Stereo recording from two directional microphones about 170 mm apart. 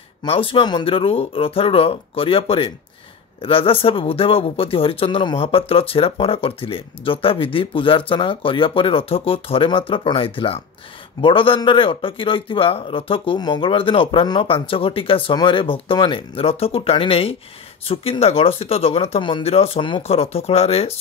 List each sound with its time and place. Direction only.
0.2 s speech: 30° left (ahead or behind)